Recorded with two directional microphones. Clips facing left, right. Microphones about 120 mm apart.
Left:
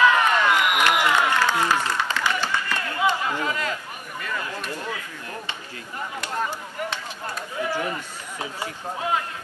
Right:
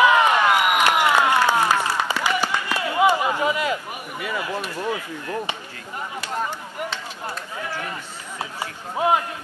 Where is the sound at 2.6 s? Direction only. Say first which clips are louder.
Right 7 dB; 15° right (ahead or behind).